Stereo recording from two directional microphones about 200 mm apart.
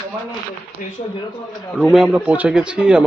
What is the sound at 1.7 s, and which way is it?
Speech, centre (ahead or behind).